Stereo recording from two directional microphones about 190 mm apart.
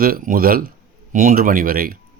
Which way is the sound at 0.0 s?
50° right (ahead or behind).